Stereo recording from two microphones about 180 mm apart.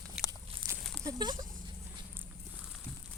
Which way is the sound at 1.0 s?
25° right (ahead or behind).